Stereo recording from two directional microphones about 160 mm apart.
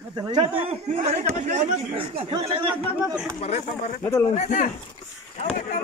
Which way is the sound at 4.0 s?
15° left (ahead or behind).